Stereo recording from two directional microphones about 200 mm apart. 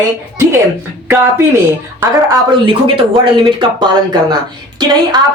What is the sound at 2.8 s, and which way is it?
A woman's voice, 25° right (ahead or behind).